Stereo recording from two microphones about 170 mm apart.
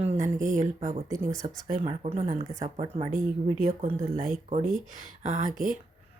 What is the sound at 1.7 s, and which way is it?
Speech, 40° right (ahead or behind).